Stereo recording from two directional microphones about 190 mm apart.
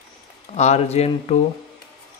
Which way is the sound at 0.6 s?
35° left (ahead or behind).